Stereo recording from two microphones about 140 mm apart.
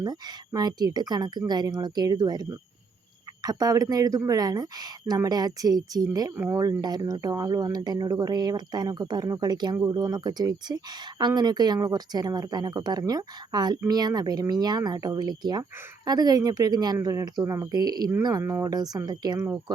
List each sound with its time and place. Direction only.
0.0 s speech: 30° right (ahead or behind)
6.3 s speech: 15° right (ahead or behind)
6.6 s speech: 30° right (ahead or behind)